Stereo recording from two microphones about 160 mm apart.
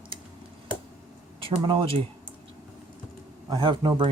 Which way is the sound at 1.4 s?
30° right (ahead or behind).